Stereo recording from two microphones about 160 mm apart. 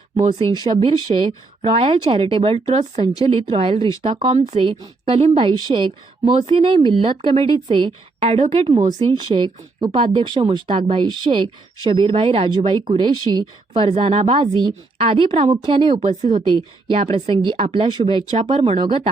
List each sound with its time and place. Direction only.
0.6 s speech: 30° right (ahead or behind)
4.4 s speech: 45° right (ahead or behind)
4.7 s speech: 30° right (ahead or behind)
16.0 s speech: 45° right (ahead or behind)
16.5 s speech: 35° right (ahead or behind)